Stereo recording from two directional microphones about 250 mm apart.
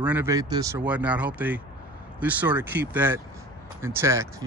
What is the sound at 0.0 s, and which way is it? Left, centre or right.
Speech, centre.